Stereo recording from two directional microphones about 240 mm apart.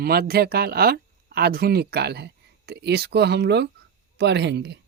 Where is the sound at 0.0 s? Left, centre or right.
Right.